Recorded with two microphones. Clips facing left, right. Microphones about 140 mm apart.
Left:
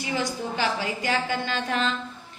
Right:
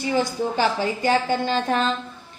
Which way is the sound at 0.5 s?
35° right (ahead or behind).